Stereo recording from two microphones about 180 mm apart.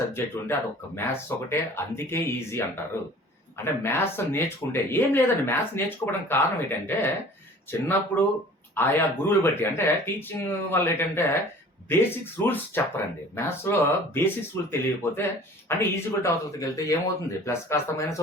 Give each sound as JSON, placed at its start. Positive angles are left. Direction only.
{"t": 0.1, "sound": "speech", "side_deg": 10}